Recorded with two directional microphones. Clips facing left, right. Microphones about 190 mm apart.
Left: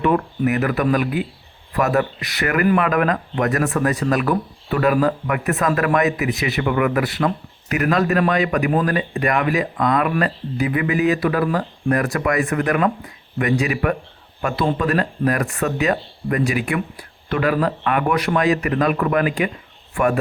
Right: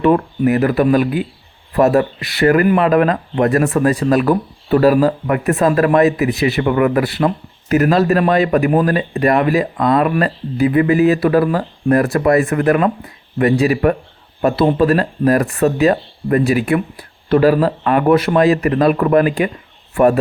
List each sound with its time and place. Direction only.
0.0 s speech: 30° right (ahead or behind)